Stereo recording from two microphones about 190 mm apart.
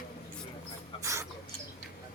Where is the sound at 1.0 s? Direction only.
15° right (ahead or behind).